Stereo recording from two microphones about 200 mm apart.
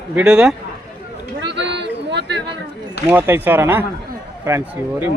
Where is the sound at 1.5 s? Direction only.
60° right (ahead or behind).